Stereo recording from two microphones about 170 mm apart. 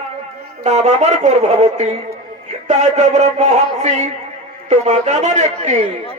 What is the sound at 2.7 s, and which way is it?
Music, 45° right (ahead or behind).